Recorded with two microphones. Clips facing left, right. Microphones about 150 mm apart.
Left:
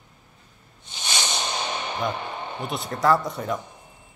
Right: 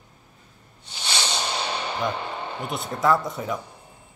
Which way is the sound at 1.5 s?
30° right (ahead or behind).